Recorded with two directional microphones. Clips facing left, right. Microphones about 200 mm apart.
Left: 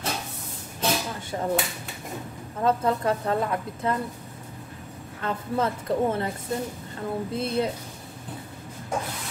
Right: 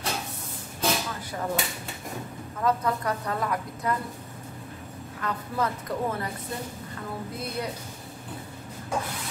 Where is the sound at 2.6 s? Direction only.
25° left (ahead or behind).